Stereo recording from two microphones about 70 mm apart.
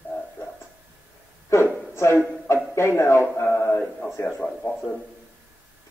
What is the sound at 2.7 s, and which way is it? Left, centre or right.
Speech, left.